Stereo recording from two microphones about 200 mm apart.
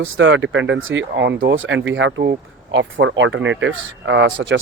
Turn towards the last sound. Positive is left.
turn(degrees=-65)  # may be behind; listen again after turning